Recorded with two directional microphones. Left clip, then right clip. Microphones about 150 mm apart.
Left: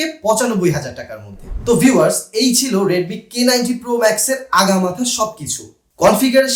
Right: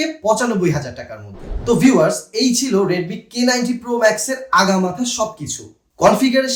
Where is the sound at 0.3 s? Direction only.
10° left (ahead or behind).